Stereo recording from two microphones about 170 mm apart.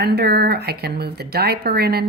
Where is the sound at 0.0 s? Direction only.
70° right (ahead or behind).